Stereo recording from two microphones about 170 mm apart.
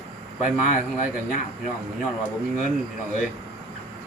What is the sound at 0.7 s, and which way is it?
Speech, 50° left (ahead or behind).